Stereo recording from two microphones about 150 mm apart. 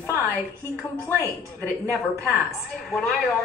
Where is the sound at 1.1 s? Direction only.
15° right (ahead or behind).